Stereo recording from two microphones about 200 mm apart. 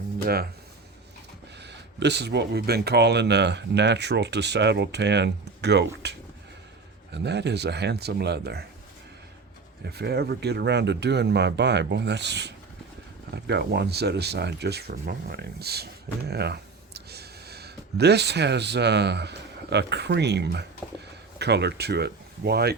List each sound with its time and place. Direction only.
1.5 s speech: 60° right (ahead or behind)
9.8 s speech: 55° right (ahead or behind)